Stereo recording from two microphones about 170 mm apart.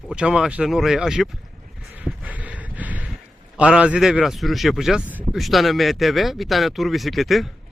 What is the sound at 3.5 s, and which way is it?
Speech, 5° right (ahead or behind).